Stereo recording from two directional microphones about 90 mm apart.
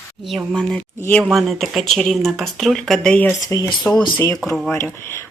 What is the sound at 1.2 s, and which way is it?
Speech, centre (ahead or behind).